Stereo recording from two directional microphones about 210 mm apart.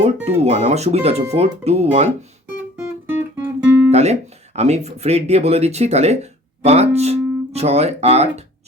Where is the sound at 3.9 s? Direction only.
30° right (ahead or behind).